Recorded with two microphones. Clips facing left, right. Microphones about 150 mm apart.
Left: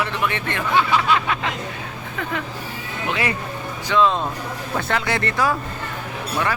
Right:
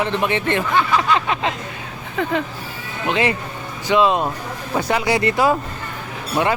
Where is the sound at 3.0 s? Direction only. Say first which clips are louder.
Right 5 dB; 25° right (ahead or behind).